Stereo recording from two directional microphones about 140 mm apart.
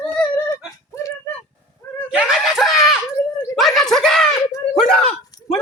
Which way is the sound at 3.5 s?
Centre (ahead or behind).